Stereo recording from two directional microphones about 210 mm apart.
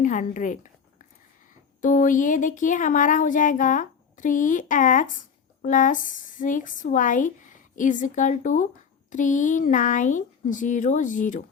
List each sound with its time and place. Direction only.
0.0 s speech: 35° left (ahead or behind)
1.8 s speech: 40° left (ahead or behind)